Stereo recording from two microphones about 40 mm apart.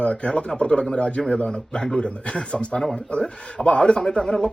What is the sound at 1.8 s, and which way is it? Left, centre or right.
Speech, centre.